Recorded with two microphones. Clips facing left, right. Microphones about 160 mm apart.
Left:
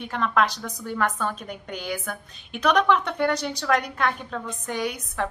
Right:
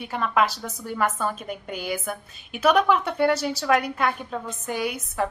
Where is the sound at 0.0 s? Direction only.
5° right (ahead or behind).